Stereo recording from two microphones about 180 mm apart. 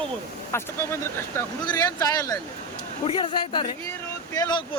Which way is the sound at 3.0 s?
30° left (ahead or behind).